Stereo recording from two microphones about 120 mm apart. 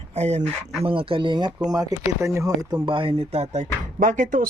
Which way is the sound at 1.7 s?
25° right (ahead or behind).